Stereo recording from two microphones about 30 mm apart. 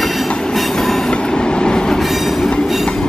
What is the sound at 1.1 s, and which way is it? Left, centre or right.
Train, left.